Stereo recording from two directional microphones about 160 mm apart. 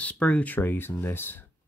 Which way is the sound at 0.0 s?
10° left (ahead or behind).